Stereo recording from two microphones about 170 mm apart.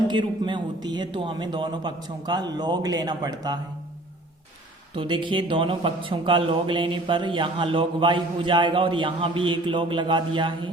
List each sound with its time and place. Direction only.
0.1 s speech: 30° right (ahead or behind)
4.9 s speech: 30° right (ahead or behind)